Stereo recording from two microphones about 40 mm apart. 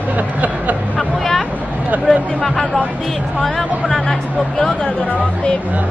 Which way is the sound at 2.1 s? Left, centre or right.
Centre.